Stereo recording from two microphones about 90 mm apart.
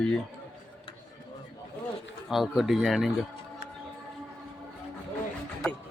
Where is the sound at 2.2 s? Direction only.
Centre (ahead or behind).